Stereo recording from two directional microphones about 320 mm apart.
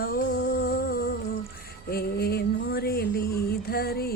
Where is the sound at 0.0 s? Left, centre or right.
Left.